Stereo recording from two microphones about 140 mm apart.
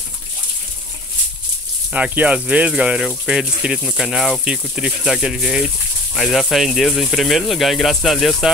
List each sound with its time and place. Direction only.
1.9 s speech: 10° right (ahead or behind)